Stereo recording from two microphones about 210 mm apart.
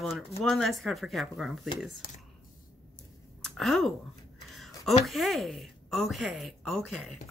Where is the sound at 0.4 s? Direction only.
Centre (ahead or behind).